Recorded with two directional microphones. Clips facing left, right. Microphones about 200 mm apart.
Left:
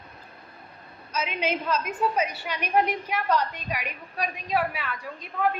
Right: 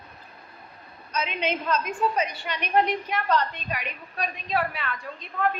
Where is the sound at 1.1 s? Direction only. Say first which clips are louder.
Even; 5° left (ahead or behind).